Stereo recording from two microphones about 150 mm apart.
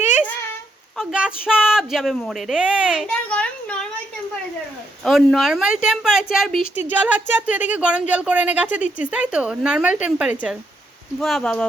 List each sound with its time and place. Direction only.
0.9 s speech: 5° right (ahead or behind)
3.1 s a sound: 5° left (ahead or behind)
5.0 s speech: centre (ahead or behind)